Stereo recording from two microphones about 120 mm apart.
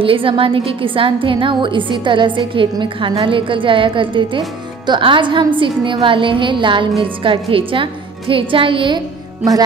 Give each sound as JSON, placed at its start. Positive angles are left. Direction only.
{"t": 0.0, "sound": "a woman's voice", "side_deg": -50}
{"t": 9.4, "sound": "music", "side_deg": -30}